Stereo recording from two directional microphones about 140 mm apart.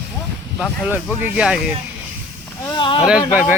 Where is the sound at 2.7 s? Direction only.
35° left (ahead or behind).